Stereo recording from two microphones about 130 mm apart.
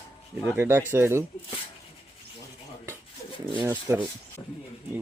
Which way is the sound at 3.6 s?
15° right (ahead or behind).